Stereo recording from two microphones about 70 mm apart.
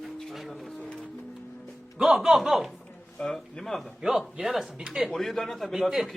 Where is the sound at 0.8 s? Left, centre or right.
Centre.